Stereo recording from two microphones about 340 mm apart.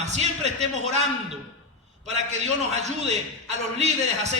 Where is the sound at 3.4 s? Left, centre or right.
Centre.